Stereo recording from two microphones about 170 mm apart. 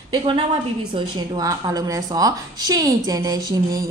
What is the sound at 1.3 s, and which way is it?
A woman's voice, 20° right (ahead or behind).